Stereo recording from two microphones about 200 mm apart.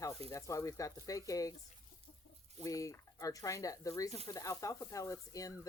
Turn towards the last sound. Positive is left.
turn(degrees=15)  # may be behind; listen again after turning